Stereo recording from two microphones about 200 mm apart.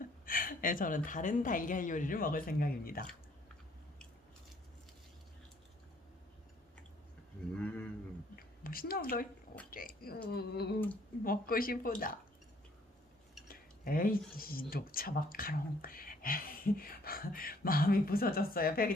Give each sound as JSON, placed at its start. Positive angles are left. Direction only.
{"t": 0.3, "sound": "speech", "side_deg": 45}
{"t": 7.5, "sound": "a sound", "side_deg": 5}
{"t": 8.4, "sound": "a woman's voice", "side_deg": 45}
{"t": 13.5, "sound": "speech", "side_deg": 45}